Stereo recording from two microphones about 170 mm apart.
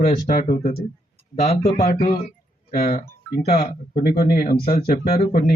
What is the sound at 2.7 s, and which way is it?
Speech, 50° left (ahead or behind).